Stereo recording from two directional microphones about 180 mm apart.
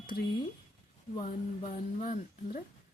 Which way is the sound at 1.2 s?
40° left (ahead or behind).